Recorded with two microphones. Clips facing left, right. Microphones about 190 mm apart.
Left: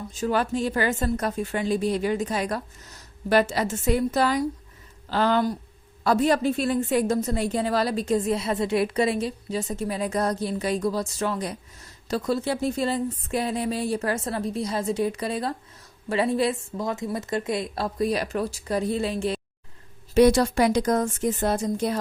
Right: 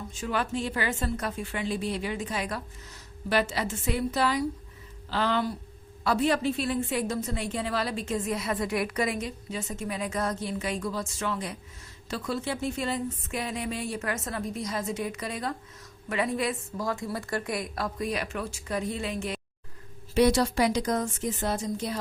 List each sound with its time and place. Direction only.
0.1 s a woman's voice: 40° left (ahead or behind)
20.1 s speech: 50° left (ahead or behind)